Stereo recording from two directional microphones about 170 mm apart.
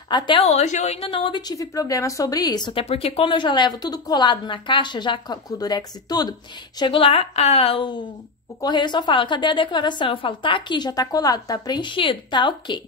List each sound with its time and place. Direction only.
0.1 s a woman's voice: 30° left (ahead or behind)
2.8 s a woman's voice: 35° left (ahead or behind)